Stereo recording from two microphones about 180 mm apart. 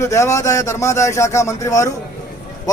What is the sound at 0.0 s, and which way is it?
Speech, 15° left (ahead or behind).